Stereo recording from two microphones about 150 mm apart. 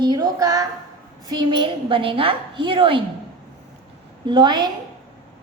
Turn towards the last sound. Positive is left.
turn(degrees=-30)  # may be behind; listen again after turning